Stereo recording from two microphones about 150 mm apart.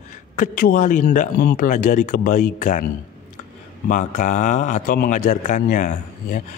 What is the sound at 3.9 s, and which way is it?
A man's voice, 55° left (ahead or behind).